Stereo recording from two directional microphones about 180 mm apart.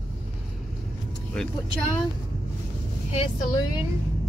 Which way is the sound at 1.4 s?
5° left (ahead or behind).